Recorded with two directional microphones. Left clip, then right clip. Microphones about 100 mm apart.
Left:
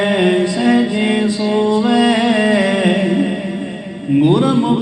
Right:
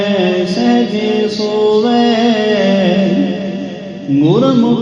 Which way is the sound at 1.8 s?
50° right (ahead or behind).